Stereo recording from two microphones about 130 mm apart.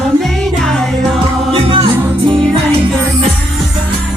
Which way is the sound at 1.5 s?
45° right (ahead or behind).